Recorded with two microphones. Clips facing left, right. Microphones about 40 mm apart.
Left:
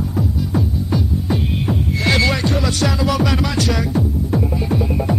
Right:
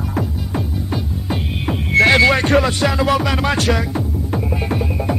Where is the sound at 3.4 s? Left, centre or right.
Right.